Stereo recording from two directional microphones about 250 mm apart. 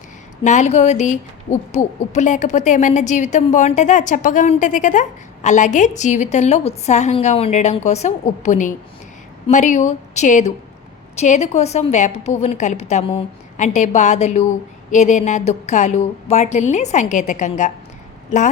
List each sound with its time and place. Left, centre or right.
0.4 s a woman's voice: left